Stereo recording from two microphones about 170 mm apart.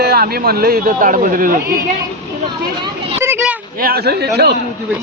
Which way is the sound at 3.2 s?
10° right (ahead or behind).